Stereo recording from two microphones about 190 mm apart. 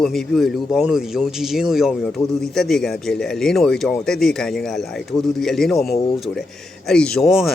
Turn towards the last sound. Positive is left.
turn(degrees=0)  # may be behind; listen again after turning